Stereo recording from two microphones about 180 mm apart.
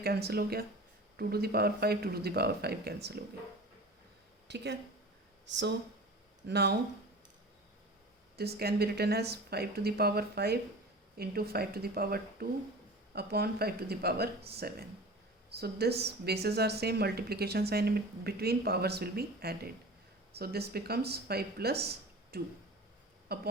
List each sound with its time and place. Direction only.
0.0 s a woman's voice: 60° right (ahead or behind)
4.4 s a woman's voice: 70° right (ahead or behind)
6.5 s a woman's voice: 65° right (ahead or behind)
8.4 s a woman's voice: 60° right (ahead or behind)